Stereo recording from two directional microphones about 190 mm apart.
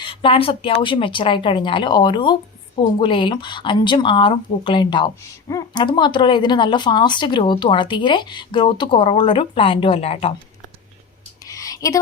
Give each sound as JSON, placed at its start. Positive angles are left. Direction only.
{"t": 0.0, "sound": "speech", "side_deg": 30}
{"t": 11.4, "sound": "whispering", "side_deg": 20}